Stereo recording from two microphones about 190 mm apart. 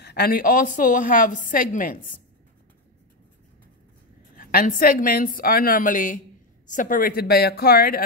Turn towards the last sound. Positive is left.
turn(degrees=50)  # may be behind; listen again after turning